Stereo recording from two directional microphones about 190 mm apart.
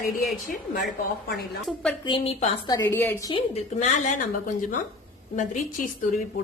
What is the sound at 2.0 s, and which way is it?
Speech, 30° left (ahead or behind).